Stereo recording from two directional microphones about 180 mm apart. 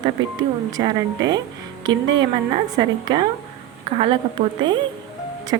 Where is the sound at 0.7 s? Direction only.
20° right (ahead or behind).